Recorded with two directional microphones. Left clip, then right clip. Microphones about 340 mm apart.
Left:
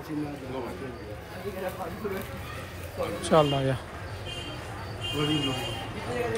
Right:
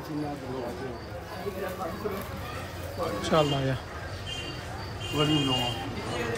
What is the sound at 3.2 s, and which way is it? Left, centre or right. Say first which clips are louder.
Speech: left 3 dB; centre.